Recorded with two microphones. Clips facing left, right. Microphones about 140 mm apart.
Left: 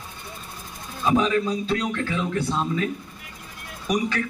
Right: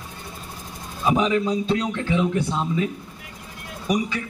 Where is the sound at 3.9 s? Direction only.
5° right (ahead or behind).